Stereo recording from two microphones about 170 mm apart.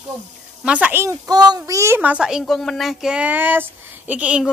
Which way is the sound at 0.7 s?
10° right (ahead or behind).